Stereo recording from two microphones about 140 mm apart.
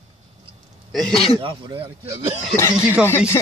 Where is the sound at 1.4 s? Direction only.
35° right (ahead or behind).